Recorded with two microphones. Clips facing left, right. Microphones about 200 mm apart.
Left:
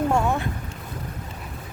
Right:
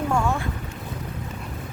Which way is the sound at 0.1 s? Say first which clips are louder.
Left 1 dB; 20° left (ahead or behind).